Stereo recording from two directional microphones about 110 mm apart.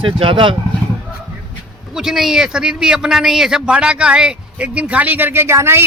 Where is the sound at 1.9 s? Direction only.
5° right (ahead or behind).